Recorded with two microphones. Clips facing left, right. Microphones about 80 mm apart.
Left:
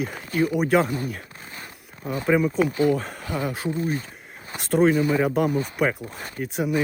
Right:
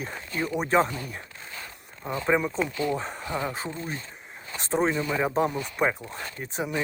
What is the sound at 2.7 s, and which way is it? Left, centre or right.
Speech, left.